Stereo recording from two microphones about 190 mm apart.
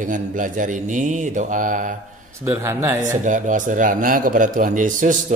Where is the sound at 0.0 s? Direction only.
45° right (ahead or behind).